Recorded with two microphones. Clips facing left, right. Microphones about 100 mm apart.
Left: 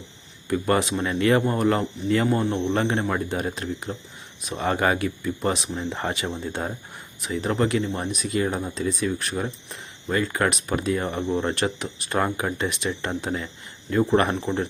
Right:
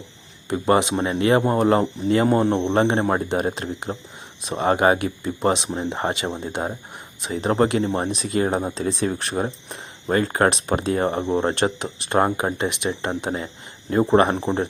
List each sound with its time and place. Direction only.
0.4 s speech: 25° right (ahead or behind)
0.9 s speech: 35° right (ahead or behind)
5.9 s speech: 25° right (ahead or behind)
6.2 s speech: 35° right (ahead or behind)
6.5 s speech: 20° right (ahead or behind)
7.3 s speech: 35° right (ahead or behind)
10.5 s speech: 30° right (ahead or behind)